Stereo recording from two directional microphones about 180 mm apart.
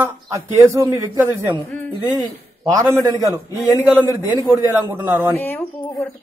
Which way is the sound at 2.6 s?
20° right (ahead or behind).